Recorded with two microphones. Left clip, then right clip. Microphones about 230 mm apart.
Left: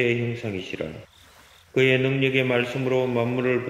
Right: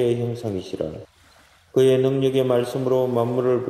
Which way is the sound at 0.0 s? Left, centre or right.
Right.